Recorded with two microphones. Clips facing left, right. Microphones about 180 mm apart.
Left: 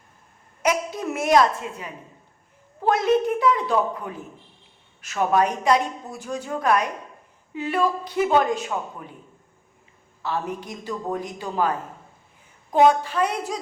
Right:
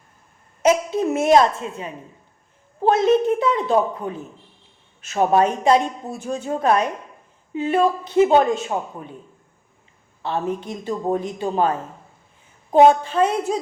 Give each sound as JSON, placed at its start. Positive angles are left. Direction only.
{"t": 0.6, "sound": "speech", "side_deg": -25}
{"t": 10.2, "sound": "speech", "side_deg": -25}
{"t": 12.7, "sound": "speech", "side_deg": -30}